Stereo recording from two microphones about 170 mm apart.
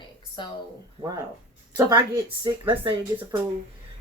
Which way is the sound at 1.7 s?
20° right (ahead or behind).